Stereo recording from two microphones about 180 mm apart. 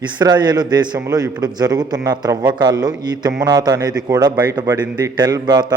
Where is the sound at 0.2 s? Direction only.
20° right (ahead or behind).